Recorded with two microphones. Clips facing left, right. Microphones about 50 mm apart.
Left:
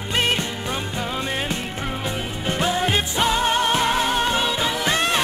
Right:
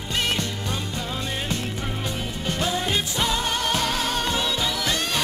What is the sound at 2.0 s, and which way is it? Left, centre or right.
Music, left.